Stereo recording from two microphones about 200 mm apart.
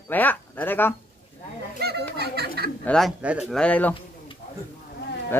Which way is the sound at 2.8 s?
5° left (ahead or behind).